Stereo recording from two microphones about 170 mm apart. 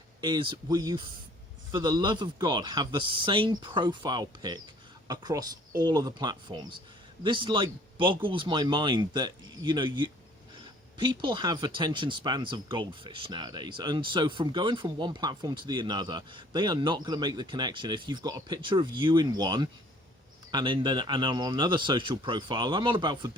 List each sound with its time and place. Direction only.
0.2 s speech: 30° right (ahead or behind)